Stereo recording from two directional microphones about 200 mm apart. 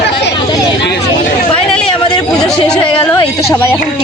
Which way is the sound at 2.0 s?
20° left (ahead or behind).